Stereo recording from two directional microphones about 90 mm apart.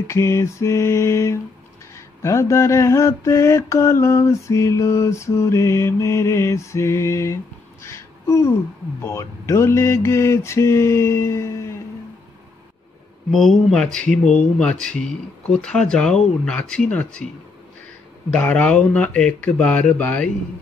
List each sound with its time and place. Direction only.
0.0 s mantra: 30° left (ahead or behind)
7.8 s a sound: 35° left (ahead or behind)
9.0 s mantra: 35° left (ahead or behind)
13.3 s speech: centre (ahead or behind)
18.3 s speech: 15° left (ahead or behind)